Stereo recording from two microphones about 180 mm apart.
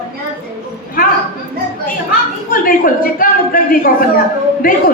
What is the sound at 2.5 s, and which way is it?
A woman's voice, 50° left (ahead or behind).